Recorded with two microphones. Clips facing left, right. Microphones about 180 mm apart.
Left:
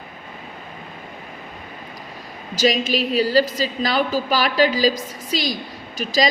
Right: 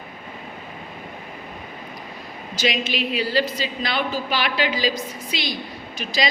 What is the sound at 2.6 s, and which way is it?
A woman's voice, 40° left (ahead or behind).